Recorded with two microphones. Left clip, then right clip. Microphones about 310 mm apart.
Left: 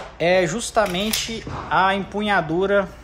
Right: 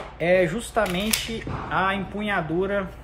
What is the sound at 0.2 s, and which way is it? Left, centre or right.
Speech, centre.